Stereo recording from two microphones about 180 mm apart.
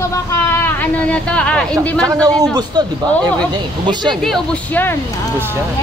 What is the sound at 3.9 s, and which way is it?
Speech, 25° right (ahead or behind).